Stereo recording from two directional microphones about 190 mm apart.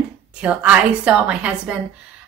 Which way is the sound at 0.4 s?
5° right (ahead or behind).